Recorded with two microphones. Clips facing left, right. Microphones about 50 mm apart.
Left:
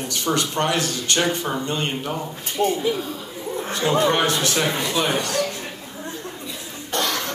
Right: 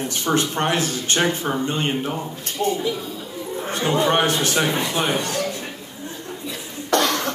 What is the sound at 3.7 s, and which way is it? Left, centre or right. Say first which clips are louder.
A man's voice: even; right.